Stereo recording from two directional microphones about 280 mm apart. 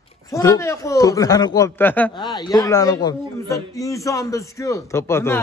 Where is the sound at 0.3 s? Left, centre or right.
Centre.